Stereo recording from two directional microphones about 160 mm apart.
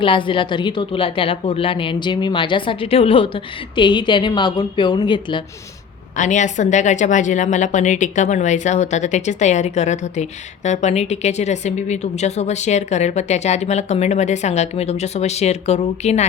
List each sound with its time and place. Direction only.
0.0 s a woman's voice: 30° left (ahead or behind)
6.1 s a woman's voice: 50° left (ahead or behind)